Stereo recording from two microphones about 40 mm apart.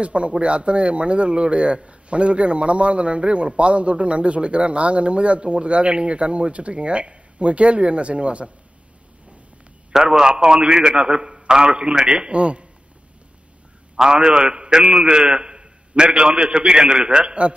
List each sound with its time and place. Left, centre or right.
0.0 s a man's voice: right
9.9 s a man's voice: centre
13.9 s a man's voice: centre